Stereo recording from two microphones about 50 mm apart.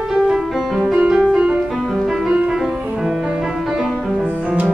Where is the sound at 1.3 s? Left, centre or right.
Right.